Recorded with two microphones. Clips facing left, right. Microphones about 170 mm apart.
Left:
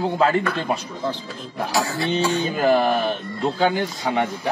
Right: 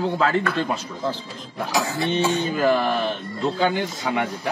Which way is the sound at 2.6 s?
35° left (ahead or behind).